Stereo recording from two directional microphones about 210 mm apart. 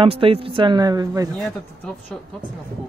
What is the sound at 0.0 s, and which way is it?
Speech, 25° right (ahead or behind).